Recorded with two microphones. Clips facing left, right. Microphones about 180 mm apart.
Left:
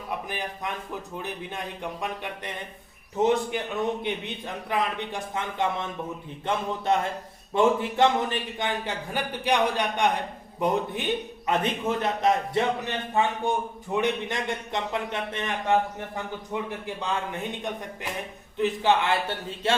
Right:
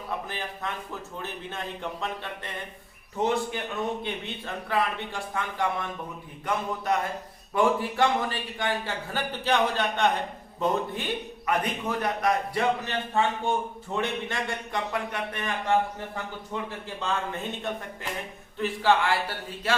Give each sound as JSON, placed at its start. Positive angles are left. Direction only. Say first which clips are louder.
{"t": 0.3, "sound": "speech", "louder": "left 2 dB", "side_deg": 15}
{"t": 4.0, "sound": "a man's voice", "louder": "left 3 dB", "side_deg": 15}